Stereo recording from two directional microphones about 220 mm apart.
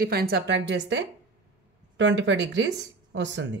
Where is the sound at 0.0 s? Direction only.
45° right (ahead or behind).